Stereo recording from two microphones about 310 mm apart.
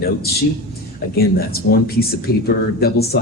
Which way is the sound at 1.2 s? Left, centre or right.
Left.